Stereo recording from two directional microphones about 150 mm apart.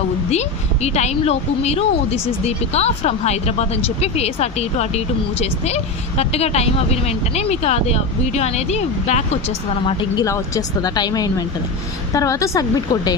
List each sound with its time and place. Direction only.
0.3 s speech: 45° left (ahead or behind)
10.2 s speech: 20° left (ahead or behind)